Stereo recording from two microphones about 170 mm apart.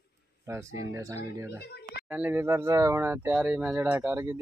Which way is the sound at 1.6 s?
75° left (ahead or behind).